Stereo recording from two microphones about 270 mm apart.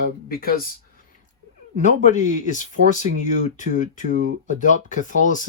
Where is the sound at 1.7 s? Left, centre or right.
Left.